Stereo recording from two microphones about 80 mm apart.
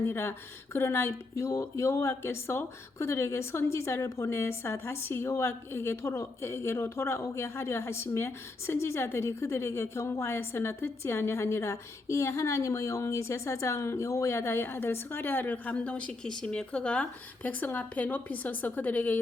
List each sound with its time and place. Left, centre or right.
0.0 s speech: left